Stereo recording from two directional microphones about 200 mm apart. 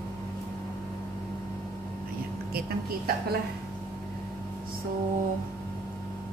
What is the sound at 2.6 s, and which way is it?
Speech, 50° right (ahead or behind).